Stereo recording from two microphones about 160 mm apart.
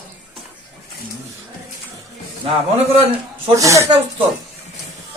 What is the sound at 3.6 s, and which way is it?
Speech, 20° right (ahead or behind).